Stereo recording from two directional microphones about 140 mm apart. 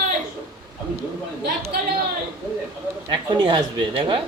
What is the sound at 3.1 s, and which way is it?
A woman's voice, 35° right (ahead or behind).